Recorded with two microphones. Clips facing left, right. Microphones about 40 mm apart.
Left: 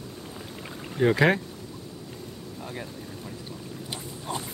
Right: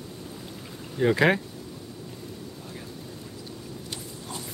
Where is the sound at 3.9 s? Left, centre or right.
Left.